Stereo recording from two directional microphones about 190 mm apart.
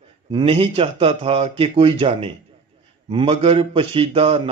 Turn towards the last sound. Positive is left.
turn(degrees=-30)  # may be behind; listen again after turning